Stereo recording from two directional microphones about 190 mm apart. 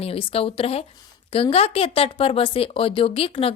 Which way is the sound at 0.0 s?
30° left (ahead or behind).